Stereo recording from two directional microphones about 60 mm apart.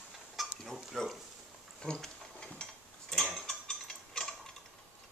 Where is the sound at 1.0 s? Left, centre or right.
Centre.